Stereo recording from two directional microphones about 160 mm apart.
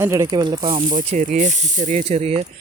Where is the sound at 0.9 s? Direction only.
50° right (ahead or behind).